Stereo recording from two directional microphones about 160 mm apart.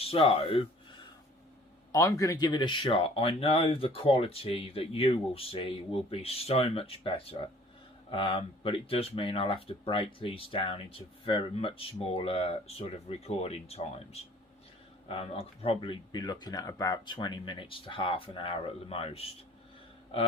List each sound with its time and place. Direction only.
0.0 s speech: 35° left (ahead or behind)
1.9 s speech: 20° left (ahead or behind); by 19.2 s 40° left (ahead or behind)